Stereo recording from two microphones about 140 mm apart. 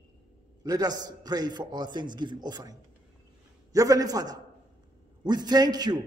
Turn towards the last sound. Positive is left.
turn(degrees=-30)  # may be behind; listen again after turning